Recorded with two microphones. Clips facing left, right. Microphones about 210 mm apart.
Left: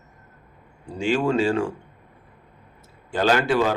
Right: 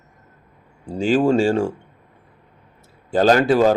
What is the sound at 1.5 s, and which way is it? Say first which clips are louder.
Speech: right 4 dB; 30° right (ahead or behind).